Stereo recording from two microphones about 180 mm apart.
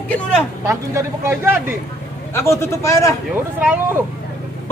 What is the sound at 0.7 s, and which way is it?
Speech, 15° right (ahead or behind).